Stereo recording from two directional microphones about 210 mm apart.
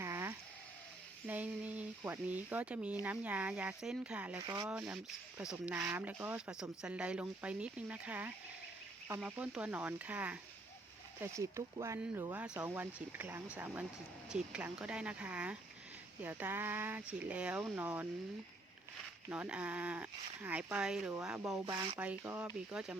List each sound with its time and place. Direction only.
0.0 s a sound: 10° right (ahead or behind)
1.3 s speech: 5° right (ahead or behind)
4.4 s speech: 15° right (ahead or behind)
4.7 s speech: 5° right (ahead or behind)
19.3 s speech: 5° right (ahead or behind)
21.7 s speech: 20° right (ahead or behind)
21.9 s speech: 10° right (ahead or behind)